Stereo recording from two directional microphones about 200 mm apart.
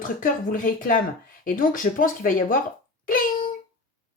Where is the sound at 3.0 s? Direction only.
45° left (ahead or behind).